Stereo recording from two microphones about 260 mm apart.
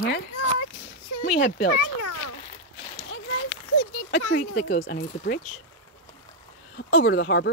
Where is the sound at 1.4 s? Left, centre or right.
Left.